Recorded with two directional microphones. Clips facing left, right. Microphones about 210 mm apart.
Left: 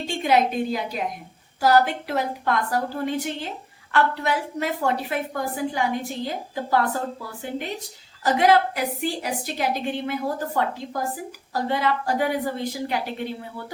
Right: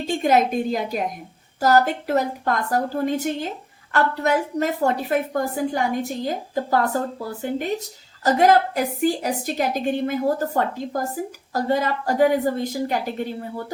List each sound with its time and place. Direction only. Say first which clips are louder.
0.2 s a woman's voice: right 1 dB; 45° right (ahead or behind)
8.2 s a woman's voice: right 2 dB; 45° right (ahead or behind)